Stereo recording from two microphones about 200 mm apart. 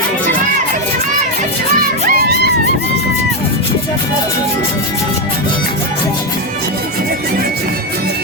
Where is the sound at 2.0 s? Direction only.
45° right (ahead or behind).